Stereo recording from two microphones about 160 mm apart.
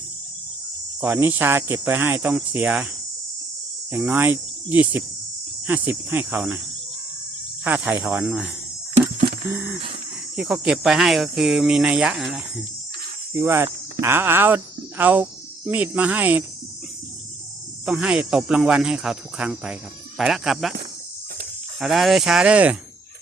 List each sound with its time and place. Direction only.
1.0 s speech: 10° right (ahead or behind)
3.9 s speech: 5° right (ahead or behind)
7.6 s speech: 10° right (ahead or behind)
9.5 s speech: 10° right (ahead or behind)
13.3 s speech: 15° right (ahead or behind)
17.8 s speech: 5° right (ahead or behind)
21.8 s speech: centre (ahead or behind)